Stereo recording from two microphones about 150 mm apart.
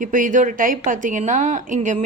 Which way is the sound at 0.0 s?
60° right (ahead or behind).